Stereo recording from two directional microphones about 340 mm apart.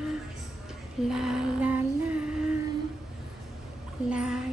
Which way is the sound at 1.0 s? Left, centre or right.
Centre.